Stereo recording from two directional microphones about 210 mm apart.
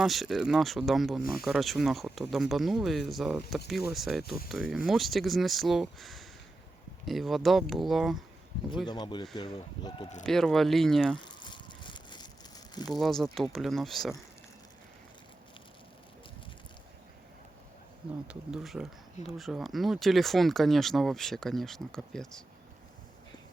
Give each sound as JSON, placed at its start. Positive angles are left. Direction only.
{"t": 0.0, "sound": "speech", "side_deg": 0}
{"t": 8.9, "sound": "speech", "side_deg": 20}
{"t": 10.2, "sound": "speech", "side_deg": 0}
{"t": 11.3, "sound": "a sound", "side_deg": 20}
{"t": 12.9, "sound": "speech", "side_deg": 0}
{"t": 18.3, "sound": "speech", "side_deg": 0}